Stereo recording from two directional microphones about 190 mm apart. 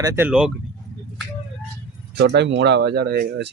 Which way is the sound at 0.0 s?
15° right (ahead or behind).